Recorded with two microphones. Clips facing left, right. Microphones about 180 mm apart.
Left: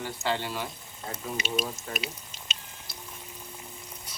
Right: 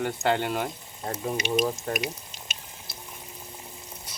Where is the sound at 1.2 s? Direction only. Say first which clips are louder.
Right 6 dB; 45° right (ahead or behind).